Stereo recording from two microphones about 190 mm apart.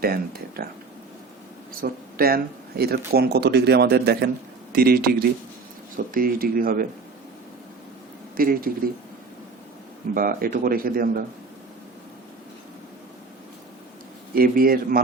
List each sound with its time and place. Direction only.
0.0 s speech: 55° right (ahead or behind)
1.8 s speech: 50° right (ahead or behind)
6.1 s speech: 50° right (ahead or behind)
8.4 s speech: 50° right (ahead or behind)
10.2 s speech: 50° right (ahead or behind)
14.3 s speech: 50° right (ahead or behind)